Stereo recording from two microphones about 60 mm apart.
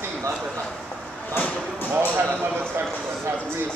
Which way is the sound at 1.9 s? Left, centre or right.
Right.